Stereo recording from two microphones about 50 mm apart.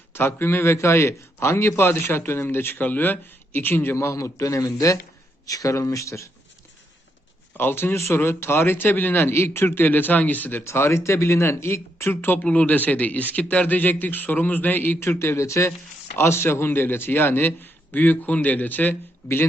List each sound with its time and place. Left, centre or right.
0.1 s a man's voice: left
3.9 s a man's voice: left
7.5 s a man's voice: left
9.3 s a man's voice: left
9.8 s a man's voice: left
10.6 s speech: left
12.4 s a man's voice: left
15.0 s speech: left
16.1 s a man's voice: left